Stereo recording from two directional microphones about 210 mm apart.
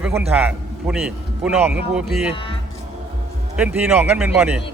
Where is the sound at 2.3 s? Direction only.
25° left (ahead or behind).